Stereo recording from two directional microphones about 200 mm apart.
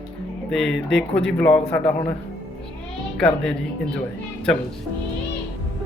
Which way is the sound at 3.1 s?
5° left (ahead or behind).